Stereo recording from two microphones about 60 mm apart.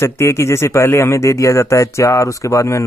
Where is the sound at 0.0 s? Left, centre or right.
Left.